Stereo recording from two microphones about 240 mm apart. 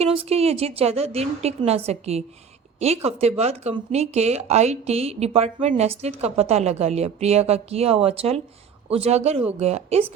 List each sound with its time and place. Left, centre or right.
0.0 s speech: right